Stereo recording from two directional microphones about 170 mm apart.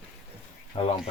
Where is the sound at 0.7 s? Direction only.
30° left (ahead or behind).